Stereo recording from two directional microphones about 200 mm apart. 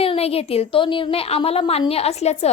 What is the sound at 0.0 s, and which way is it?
A woman's voice, 30° left (ahead or behind).